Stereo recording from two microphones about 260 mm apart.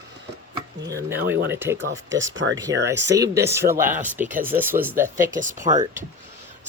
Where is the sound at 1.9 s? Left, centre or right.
Right.